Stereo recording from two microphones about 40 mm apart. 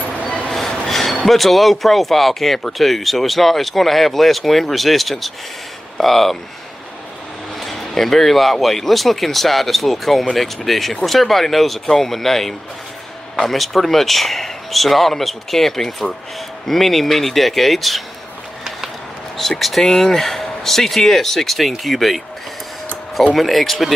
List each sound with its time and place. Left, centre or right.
0.0 s dog: left
0.5 s a sound: centre
1.2 s speech: centre
7.6 s speech: centre
19.8 s speech: centre
23.3 s speech: centre